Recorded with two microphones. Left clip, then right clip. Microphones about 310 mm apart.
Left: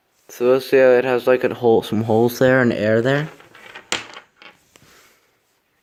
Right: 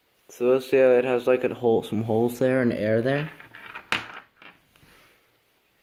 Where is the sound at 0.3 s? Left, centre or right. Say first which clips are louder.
Left 5 dB; left.